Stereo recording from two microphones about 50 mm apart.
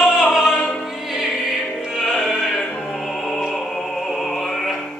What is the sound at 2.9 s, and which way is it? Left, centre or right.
Opera, centre.